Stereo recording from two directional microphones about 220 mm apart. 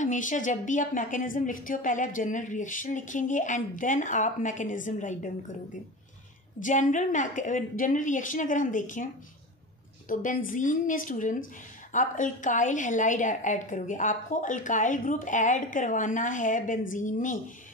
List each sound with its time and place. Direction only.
0.0 s a woman's voice: 35° left (ahead or behind)
6.6 s a woman's voice: 35° left (ahead or behind)